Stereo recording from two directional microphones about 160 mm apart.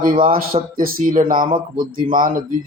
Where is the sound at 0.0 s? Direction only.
60° right (ahead or behind).